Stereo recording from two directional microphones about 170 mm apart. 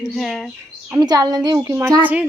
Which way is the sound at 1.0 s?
25° right (ahead or behind).